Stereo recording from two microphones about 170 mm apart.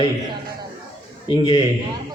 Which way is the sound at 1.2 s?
35° left (ahead or behind).